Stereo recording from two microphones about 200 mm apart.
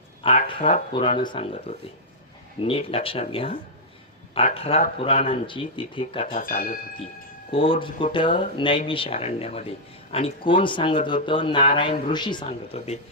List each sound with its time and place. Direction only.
0.2 s speech: 25° left (ahead or behind)
0.6 s speech: 35° left (ahead or behind)
0.9 s speech: 25° left (ahead or behind)
6.2 s speech: 45° left (ahead or behind)
7.5 s speech: 25° left (ahead or behind)